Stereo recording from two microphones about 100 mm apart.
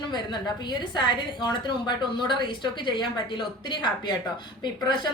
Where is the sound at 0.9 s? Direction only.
50° left (ahead or behind).